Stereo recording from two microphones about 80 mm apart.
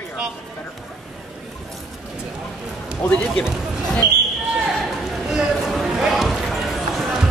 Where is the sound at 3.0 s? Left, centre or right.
Centre.